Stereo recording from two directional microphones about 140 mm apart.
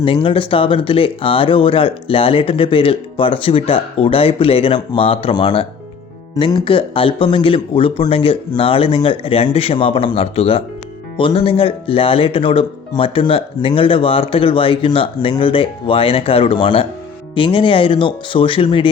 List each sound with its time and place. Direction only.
0.0 s speech: 40° left (ahead or behind)